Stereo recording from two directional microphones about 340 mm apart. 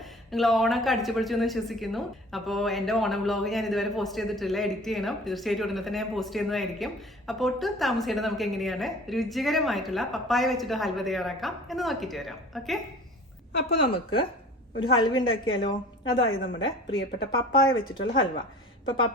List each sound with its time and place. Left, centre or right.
0.3 s a woman's voice: centre
13.5 s a woman's voice: left
14.9 s a woman's voice: centre
16.8 s speech: left
17.9 s a woman's voice: centre